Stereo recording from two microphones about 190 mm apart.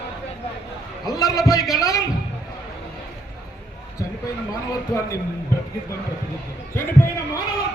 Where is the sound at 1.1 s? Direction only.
20° left (ahead or behind).